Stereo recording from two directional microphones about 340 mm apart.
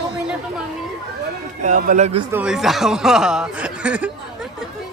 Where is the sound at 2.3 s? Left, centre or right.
Centre.